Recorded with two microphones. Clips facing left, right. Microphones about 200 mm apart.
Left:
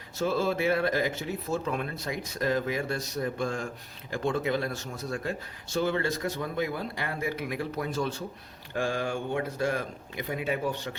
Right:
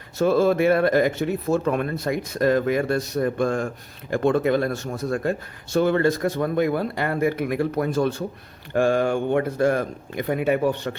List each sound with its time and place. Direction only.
0.2 s speech: 60° right (ahead or behind)